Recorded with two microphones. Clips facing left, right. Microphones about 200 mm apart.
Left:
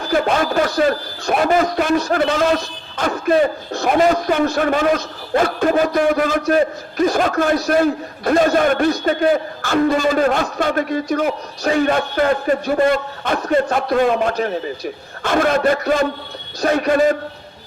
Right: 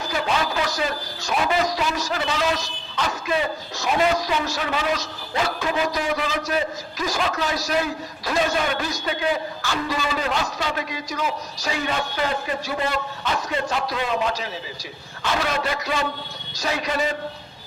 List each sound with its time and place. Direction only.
0.1 s speech: 50° left (ahead or behind)